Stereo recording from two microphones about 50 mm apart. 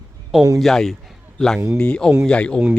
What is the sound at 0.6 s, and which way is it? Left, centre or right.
A man's voice, centre.